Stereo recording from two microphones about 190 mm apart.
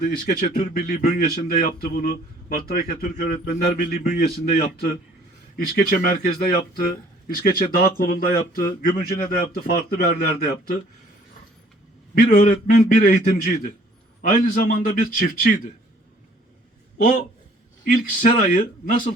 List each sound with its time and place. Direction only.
0.0 s a man's voice: 50° left (ahead or behind)
12.1 s a man's voice: 40° left (ahead or behind)
17.8 s a man's voice: 45° left (ahead or behind)